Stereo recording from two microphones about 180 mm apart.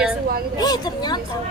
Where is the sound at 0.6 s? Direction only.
20° left (ahead or behind).